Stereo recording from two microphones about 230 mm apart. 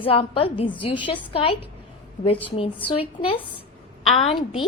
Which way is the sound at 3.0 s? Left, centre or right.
Left.